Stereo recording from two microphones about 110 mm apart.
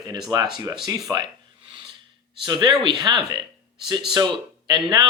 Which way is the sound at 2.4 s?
40° right (ahead or behind).